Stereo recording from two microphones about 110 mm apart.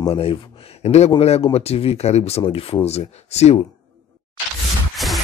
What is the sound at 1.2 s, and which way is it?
Speech, 65° left (ahead or behind).